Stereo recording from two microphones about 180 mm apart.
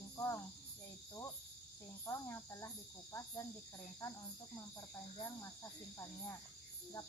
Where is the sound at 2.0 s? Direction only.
15° left (ahead or behind).